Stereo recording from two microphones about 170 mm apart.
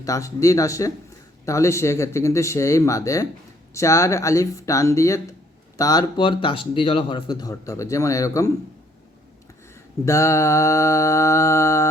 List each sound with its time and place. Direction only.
0.0 s speech: 20° left (ahead or behind)
10.1 s speech: 20° left (ahead or behind)